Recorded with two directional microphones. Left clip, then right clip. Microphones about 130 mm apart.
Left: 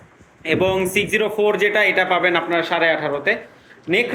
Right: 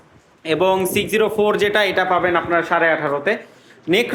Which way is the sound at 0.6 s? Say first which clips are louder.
Right 2 dB; 30° right (ahead or behind).